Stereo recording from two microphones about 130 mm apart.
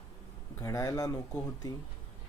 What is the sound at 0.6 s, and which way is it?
Speech, 25° left (ahead or behind).